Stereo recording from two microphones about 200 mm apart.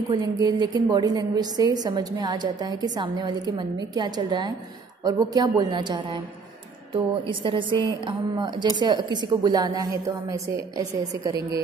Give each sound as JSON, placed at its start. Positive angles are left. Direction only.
{"t": 0.1, "sound": "a woman's voice", "side_deg": -20}
{"t": 7.2, "sound": "a woman's voice", "side_deg": -25}